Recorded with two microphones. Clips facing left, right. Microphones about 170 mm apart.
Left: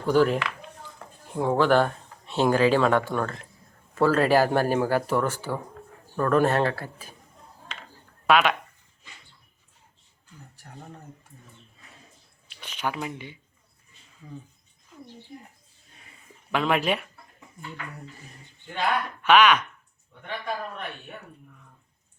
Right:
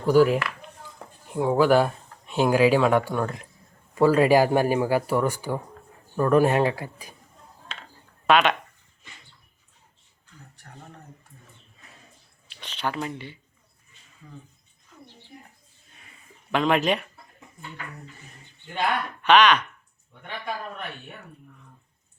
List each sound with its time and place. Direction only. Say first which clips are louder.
0.0 s speech: right 3 dB; 10° right (ahead or behind)
8.3 s speech: right 1 dB; 5° left (ahead or behind)
12.5 s speech: right 1 dB; 10° left (ahead or behind)
16.5 s speech: right 2 dB; 5° left (ahead or behind)
19.2 s speech: right 1 dB; 5° left (ahead or behind)